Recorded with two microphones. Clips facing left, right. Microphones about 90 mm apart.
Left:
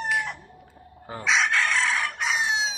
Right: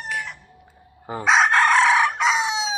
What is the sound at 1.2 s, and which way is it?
Chicken, 50° right (ahead or behind).